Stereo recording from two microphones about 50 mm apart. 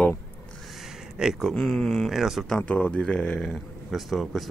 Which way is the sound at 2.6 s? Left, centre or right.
Left.